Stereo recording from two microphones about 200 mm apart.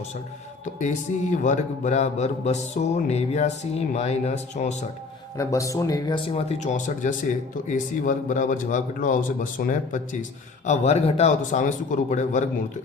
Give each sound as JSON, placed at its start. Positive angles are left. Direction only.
{"t": 0.6, "sound": "speech", "side_deg": 40}
{"t": 5.4, "sound": "speech", "side_deg": 15}